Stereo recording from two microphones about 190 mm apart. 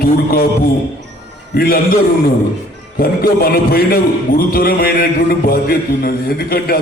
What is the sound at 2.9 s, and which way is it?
A man's voice, 50° left (ahead or behind).